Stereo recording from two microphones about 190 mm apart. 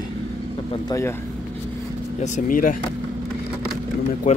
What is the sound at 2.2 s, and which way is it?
Speech, 45° left (ahead or behind).